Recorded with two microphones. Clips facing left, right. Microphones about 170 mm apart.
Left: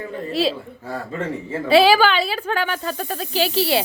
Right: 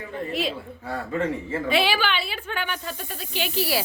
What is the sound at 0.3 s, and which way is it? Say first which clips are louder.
Speech: left 7 dB; 35° left (ahead or behind).